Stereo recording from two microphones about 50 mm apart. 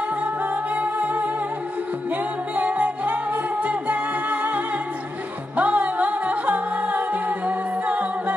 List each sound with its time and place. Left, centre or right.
0.7 s music: right
2.5 s music: right